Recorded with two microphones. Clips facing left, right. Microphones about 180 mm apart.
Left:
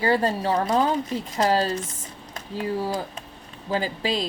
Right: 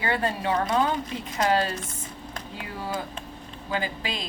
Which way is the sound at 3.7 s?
35° left (ahead or behind).